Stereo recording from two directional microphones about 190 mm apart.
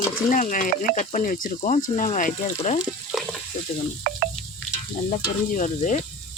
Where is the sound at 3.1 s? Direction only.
Centre (ahead or behind).